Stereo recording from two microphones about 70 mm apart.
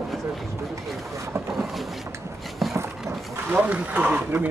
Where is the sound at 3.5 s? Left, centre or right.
Centre.